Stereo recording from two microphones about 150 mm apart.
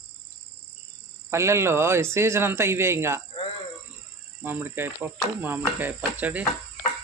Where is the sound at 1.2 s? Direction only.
20° right (ahead or behind).